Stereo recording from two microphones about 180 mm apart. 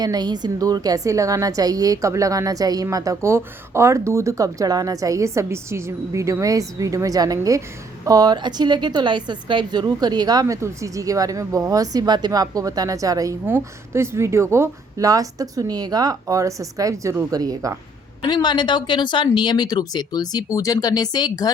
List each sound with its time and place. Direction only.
0.0 s a woman's voice: 25° right (ahead or behind)
18.2 s speech: 25° left (ahead or behind)